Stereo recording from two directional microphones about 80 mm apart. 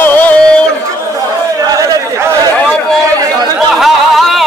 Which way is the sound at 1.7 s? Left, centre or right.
Right.